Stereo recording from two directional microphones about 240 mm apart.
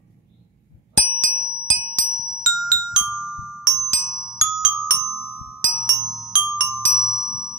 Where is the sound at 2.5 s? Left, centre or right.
Centre.